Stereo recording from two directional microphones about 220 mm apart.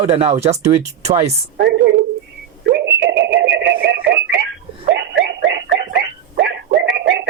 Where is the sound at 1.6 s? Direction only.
50° right (ahead or behind).